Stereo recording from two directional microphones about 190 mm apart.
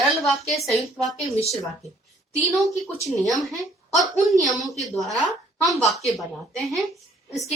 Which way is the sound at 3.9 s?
Centre (ahead or behind).